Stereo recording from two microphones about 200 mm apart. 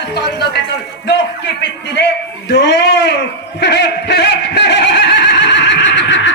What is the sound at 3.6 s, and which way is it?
Neigh, 60° left (ahead or behind).